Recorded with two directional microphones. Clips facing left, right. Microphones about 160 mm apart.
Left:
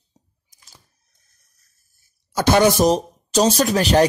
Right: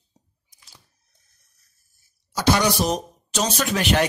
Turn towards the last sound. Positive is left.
turn(degrees=35)  # may be behind; listen again after turning